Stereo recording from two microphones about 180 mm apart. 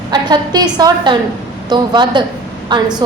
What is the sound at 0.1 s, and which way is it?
A woman's voice, 25° right (ahead or behind).